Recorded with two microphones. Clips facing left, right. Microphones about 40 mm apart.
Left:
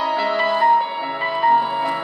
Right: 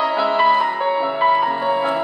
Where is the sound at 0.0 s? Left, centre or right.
Centre.